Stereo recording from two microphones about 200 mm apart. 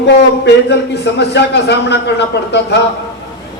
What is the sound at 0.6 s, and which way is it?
A man's voice, 60° left (ahead or behind).